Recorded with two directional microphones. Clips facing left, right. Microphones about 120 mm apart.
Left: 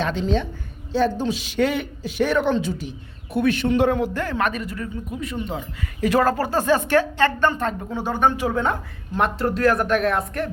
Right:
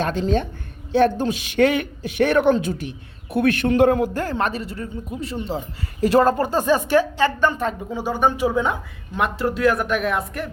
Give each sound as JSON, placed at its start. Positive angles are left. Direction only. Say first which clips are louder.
{"t": 0.0, "sound": "a man's voice", "louder": "right 1 dB", "side_deg": -45}